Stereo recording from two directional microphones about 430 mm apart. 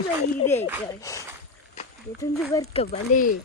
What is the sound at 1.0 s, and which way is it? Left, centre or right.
Speech, centre.